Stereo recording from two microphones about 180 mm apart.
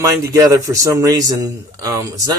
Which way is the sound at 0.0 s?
20° right (ahead or behind).